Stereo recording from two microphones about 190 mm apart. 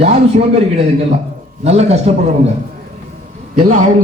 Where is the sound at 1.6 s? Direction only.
35° right (ahead or behind).